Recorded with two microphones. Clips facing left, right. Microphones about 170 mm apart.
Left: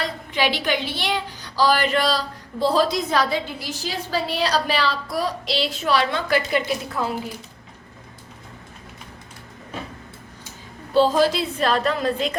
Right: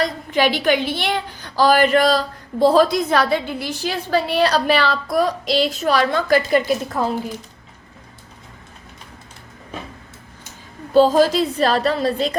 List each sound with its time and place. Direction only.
0.0 s a woman's voice: 45° right (ahead or behind)
10.9 s a woman's voice: 45° right (ahead or behind)